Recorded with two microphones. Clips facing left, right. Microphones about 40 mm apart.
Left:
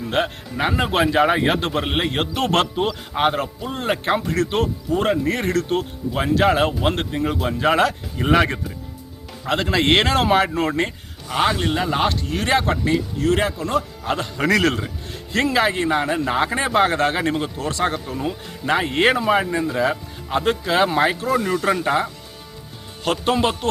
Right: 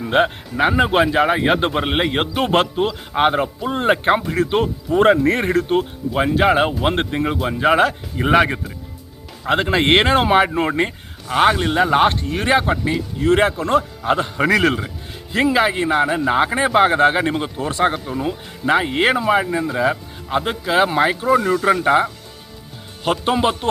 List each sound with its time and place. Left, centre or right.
0.0 s a man's voice: centre
1.5 s a man's voice: centre
4.3 s a man's voice: centre
4.9 s speech: right
5.4 s a man's voice: centre
6.8 s speech: right
7.3 s a man's voice: centre
9.5 s a man's voice: right
11.8 s speech: right
12.3 s a man's voice: centre
13.2 s speech: right
14.0 s a man's voice: centre
21.2 s a man's voice: centre